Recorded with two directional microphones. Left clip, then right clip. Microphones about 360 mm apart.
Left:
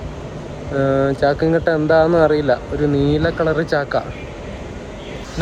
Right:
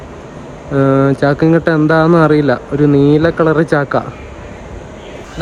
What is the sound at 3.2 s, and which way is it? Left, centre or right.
Speech, right.